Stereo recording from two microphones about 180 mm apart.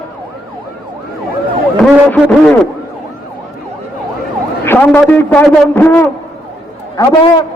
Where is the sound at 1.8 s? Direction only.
5° left (ahead or behind).